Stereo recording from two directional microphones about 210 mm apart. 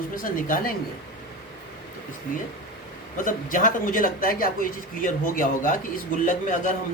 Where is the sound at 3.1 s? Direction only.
40° left (ahead or behind).